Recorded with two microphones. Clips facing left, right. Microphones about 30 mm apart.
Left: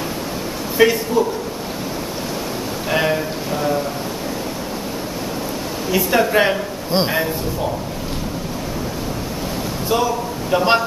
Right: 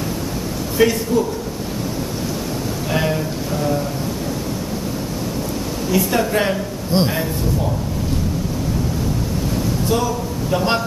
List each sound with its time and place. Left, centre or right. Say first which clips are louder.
0.7 s a man's voice: left 1 dB; centre
2.9 s a sound: left 3 dB; centre
5.9 s a man's voice: left 2 dB; centre
9.8 s speech: left 4 dB; centre